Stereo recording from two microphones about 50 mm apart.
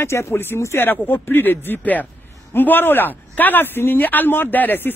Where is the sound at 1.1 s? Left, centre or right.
Left.